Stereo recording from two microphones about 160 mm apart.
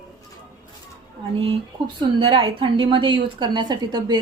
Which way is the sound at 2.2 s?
30° right (ahead or behind).